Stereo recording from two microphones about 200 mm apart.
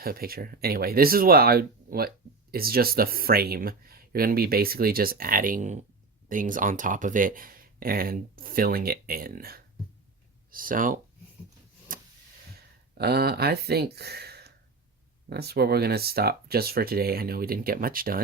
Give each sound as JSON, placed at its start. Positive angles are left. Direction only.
{"t": 0.0, "sound": "speech", "side_deg": -50}
{"t": 11.9, "sound": "a sound", "side_deg": -45}
{"t": 12.9, "sound": "speech", "side_deg": -50}